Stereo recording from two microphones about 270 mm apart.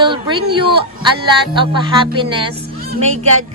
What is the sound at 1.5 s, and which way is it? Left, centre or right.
Speech, centre.